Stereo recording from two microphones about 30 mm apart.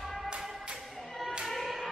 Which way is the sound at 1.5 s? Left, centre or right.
Centre.